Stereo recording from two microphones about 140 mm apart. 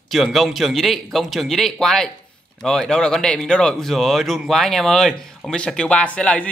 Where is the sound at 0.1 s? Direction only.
Centre (ahead or behind).